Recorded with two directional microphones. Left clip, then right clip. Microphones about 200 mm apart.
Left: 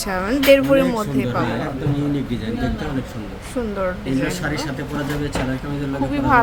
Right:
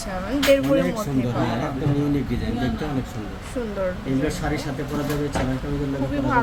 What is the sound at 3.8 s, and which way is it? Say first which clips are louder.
Speech: left 1 dB; 10° left (ahead or behind).